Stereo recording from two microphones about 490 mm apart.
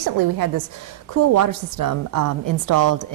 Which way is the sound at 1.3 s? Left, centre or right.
Right.